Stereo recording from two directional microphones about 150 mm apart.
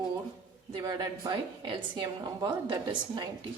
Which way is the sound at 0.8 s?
25° right (ahead or behind).